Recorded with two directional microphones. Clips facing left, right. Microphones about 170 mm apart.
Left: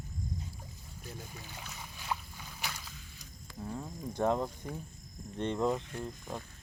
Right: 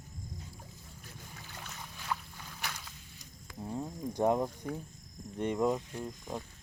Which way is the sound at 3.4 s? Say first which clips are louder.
Right 2 dB; 20° right (ahead or behind).